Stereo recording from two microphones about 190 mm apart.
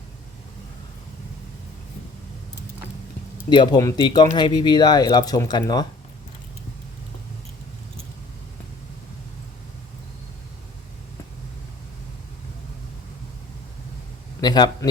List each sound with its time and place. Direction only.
3.5 s speech: 20° left (ahead or behind)
14.4 s speech: 20° left (ahead or behind)